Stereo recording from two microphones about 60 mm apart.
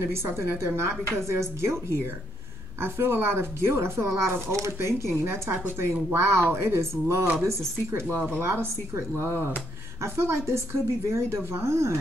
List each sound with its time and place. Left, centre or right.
0.0 s a woman's voice: right
4.1 s a woman's voice: right